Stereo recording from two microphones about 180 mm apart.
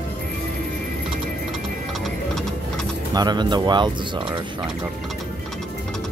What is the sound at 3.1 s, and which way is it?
Speech, 25° right (ahead or behind).